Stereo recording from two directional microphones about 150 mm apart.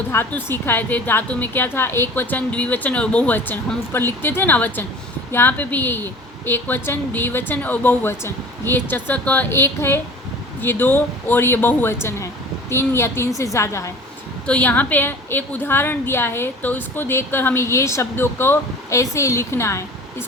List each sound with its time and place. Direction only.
0.1 s a woman's voice: 15° left (ahead or behind)
14.4 s a woman's voice: 10° left (ahead or behind)